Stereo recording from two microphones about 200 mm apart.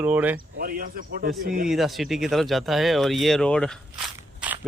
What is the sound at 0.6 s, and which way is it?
Speech, 45° right (ahead or behind).